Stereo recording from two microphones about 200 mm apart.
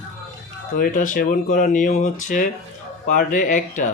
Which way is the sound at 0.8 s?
40° left (ahead or behind).